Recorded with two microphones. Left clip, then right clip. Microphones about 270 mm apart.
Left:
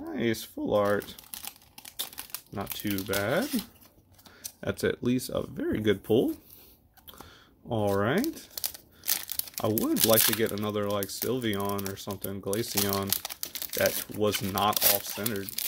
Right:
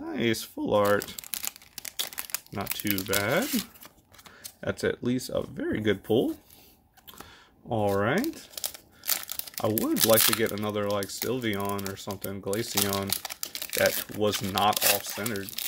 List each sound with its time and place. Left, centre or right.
0.0 s speech: centre
2.0 s crumpling: right
2.8 s speech: centre
4.6 s speech: centre
7.1 s a sound: centre
8.6 s crumpling: centre
9.7 s speech: centre